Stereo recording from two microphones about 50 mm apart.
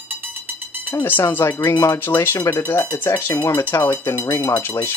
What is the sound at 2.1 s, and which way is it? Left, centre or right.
Speech, left.